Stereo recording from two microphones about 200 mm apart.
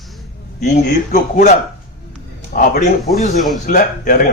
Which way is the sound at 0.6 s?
40° left (ahead or behind).